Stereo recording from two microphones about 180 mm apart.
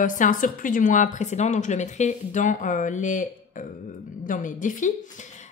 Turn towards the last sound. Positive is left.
turn(degrees=45)  # may be behind; listen again after turning